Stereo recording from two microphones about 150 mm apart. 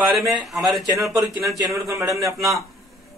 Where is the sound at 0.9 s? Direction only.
20° right (ahead or behind).